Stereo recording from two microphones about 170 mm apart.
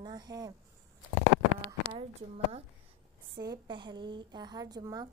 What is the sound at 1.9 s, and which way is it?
Speech, 35° right (ahead or behind).